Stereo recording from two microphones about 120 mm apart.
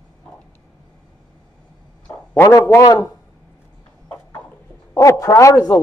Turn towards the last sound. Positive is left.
turn(degrees=25)  # may be behind; listen again after turning